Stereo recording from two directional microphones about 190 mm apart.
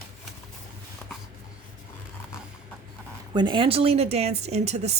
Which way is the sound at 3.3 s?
25° right (ahead or behind).